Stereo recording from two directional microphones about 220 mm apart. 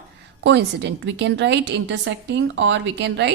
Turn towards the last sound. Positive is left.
turn(degrees=-50)  # may be behind; listen again after turning